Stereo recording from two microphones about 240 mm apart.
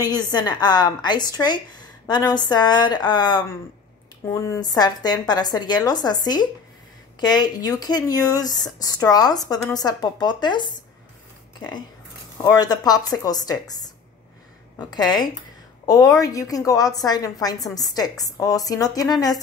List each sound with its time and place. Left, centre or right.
0.0 s speech: centre
12.4 s speech: centre
14.8 s speech: centre